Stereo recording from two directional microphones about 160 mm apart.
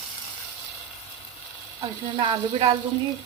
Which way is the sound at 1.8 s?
30° right (ahead or behind).